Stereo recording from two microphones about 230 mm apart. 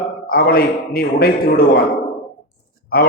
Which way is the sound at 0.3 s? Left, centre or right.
Left.